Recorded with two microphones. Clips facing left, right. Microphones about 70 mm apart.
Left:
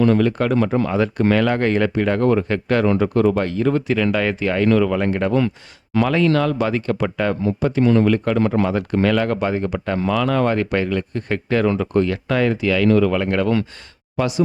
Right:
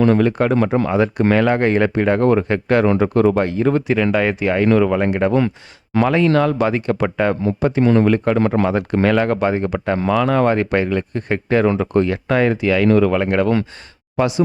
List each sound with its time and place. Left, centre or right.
0.0 s speech: right
0.9 s speech: centre